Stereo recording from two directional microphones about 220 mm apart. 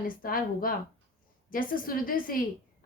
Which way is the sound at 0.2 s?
40° left (ahead or behind).